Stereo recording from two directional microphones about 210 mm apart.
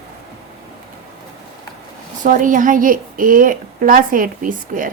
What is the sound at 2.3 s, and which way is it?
A woman's voice, 40° right (ahead or behind).